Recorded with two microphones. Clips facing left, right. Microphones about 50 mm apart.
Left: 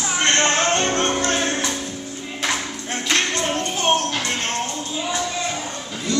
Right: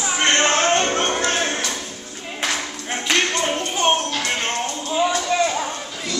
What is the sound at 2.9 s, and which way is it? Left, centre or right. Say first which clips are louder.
Clapping: right 1 dB; centre.